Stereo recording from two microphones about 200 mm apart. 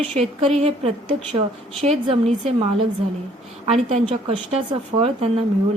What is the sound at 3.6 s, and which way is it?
A woman's voice, 30° right (ahead or behind).